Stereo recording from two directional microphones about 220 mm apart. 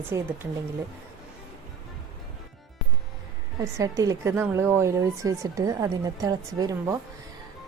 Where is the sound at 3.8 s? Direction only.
15° right (ahead or behind).